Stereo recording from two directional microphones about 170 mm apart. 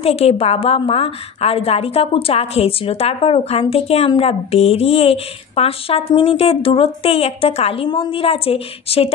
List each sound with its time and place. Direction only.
0.0 s a woman's voice: 35° left (ahead or behind)